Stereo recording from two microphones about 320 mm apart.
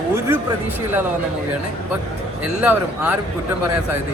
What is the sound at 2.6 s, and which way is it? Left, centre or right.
Speech, centre.